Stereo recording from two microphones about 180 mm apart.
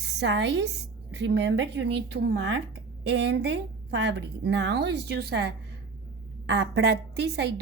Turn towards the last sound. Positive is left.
turn(degrees=-65)  # may be behind; listen again after turning